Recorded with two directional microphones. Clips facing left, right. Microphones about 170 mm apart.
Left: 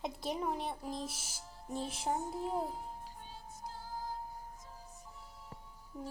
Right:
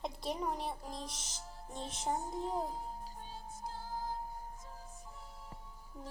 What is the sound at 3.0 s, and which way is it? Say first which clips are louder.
Music: right 2 dB; 40° right (ahead or behind).